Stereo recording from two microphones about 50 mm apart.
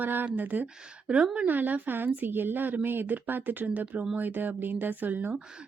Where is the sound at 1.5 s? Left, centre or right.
Right.